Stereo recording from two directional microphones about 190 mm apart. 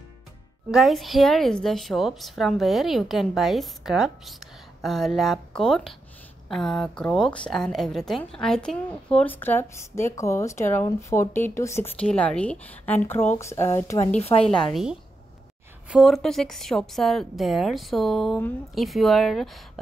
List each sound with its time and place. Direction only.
0.7 s a woman's voice: centre (ahead or behind); by 14.1 s 15° left (ahead or behind)
14.1 s a woman's voice: 30° left (ahead or behind)
14.5 s a woman's voice: centre (ahead or behind)